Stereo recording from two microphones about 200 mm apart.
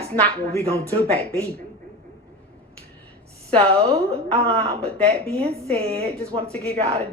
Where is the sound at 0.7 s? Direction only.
30° right (ahead or behind).